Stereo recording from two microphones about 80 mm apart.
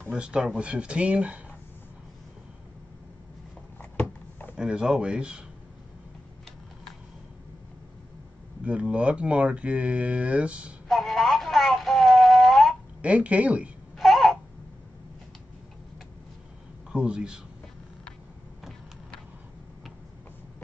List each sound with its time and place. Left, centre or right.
0.1 s speech: centre
3.9 s a sound: left
4.6 s speech: centre
8.6 s speech: centre
10.9 s a sound: centre
13.0 s speech: centre
13.9 s babbling: centre
16.9 s speech: centre
18.6 s vehicle: centre